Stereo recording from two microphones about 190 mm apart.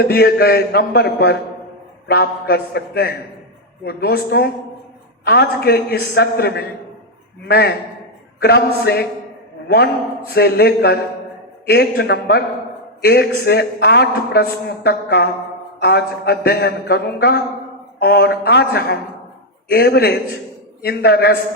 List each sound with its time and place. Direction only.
0.0 s a man's voice: 55° left (ahead or behind)